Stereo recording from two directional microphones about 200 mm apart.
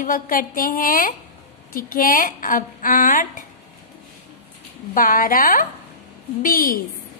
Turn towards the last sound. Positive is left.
turn(degrees=45)  # may be behind; listen again after turning